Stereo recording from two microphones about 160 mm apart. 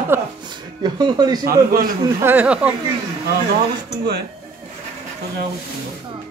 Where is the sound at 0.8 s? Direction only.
25° right (ahead or behind).